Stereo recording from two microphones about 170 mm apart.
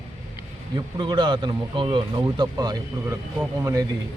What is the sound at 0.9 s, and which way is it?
A man's voice, 30° right (ahead or behind).